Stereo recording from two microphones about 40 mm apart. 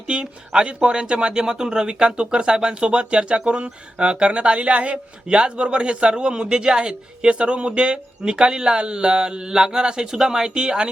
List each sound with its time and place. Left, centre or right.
0.1 s speech: right